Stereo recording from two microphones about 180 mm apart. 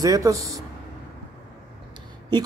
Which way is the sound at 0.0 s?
20° right (ahead or behind).